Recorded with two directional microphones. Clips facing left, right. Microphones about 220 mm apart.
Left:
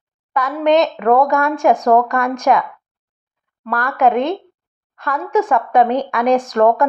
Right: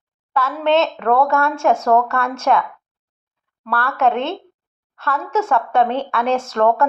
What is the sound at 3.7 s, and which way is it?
Speech, 15° left (ahead or behind).